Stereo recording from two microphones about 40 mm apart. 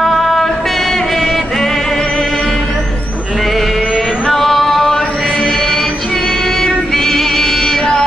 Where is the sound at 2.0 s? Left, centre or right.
Centre.